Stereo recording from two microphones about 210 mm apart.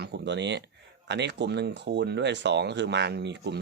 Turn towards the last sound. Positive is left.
turn(degrees=-50)  # may be behind; listen again after turning